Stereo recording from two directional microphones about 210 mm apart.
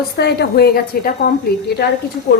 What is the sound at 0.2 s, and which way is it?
A woman's voice, 50° left (ahead or behind).